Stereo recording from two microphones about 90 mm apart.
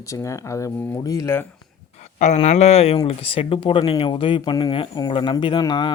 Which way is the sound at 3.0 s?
90° left.